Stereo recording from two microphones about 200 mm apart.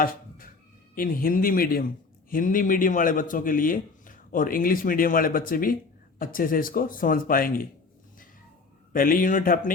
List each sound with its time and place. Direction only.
0.0 s cat: 45° left (ahead or behind)
0.9 s a man's voice: 45° left (ahead or behind)
8.9 s a man's voice: 45° left (ahead or behind)